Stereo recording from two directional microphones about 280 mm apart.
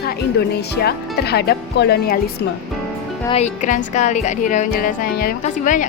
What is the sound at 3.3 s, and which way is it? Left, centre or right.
A woman's voice, left.